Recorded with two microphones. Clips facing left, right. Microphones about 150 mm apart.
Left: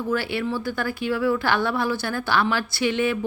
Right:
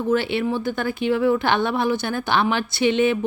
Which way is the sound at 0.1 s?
20° right (ahead or behind).